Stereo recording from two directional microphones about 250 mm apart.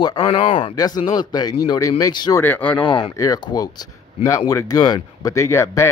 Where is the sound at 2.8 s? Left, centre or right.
Left.